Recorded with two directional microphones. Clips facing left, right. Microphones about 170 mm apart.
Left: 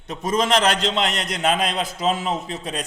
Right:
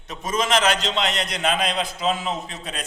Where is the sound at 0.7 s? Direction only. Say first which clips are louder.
Left 2 dB; 55° left (ahead or behind).